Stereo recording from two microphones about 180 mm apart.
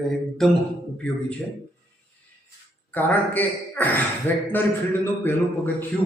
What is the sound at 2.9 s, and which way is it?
A man's voice, 10° left (ahead or behind).